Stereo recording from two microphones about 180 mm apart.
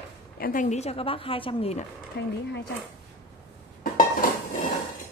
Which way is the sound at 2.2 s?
65° left (ahead or behind).